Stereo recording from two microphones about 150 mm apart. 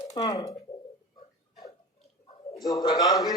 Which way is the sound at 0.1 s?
25° left (ahead or behind).